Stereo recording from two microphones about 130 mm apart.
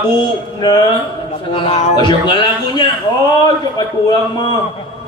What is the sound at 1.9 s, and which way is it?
A man's voice, 35° left (ahead or behind).